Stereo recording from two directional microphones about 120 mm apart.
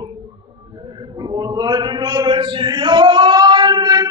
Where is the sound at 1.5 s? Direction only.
35° right (ahead or behind).